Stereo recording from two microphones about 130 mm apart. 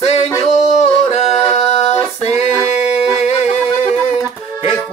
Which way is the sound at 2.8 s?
55° left (ahead or behind).